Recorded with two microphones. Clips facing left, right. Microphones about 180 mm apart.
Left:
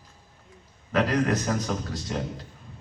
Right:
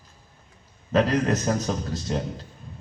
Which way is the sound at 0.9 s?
25° right (ahead or behind).